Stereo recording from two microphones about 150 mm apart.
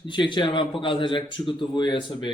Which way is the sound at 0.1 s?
30° left (ahead or behind).